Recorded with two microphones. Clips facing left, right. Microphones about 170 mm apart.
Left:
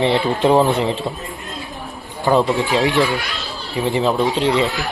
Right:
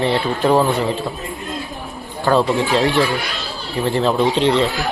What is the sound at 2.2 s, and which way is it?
Speech, 20° left (ahead or behind).